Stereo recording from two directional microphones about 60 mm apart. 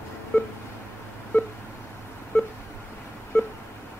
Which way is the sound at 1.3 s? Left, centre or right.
Left.